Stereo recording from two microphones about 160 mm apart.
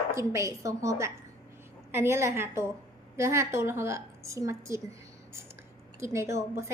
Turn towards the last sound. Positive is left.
turn(degrees=-15)  # may be behind; listen again after turning